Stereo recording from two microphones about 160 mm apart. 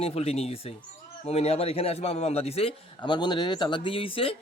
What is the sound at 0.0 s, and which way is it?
A man's voice, 40° left (ahead or behind).